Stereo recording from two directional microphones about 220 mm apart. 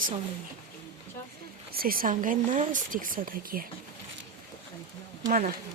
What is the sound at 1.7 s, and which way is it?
Speech, 40° right (ahead or behind).